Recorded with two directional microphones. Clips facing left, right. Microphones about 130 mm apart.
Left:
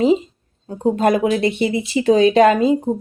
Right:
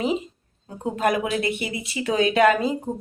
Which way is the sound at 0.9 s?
30° left (ahead or behind).